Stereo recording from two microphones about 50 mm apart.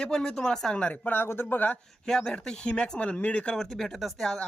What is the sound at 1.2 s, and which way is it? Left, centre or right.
Speech, left.